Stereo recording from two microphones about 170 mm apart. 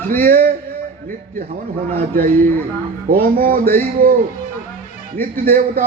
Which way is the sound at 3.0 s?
60° right (ahead or behind).